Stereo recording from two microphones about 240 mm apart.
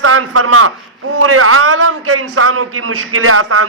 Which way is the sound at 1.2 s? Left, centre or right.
Right.